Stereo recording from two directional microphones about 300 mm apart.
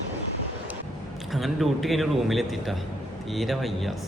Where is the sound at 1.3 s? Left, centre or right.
Centre.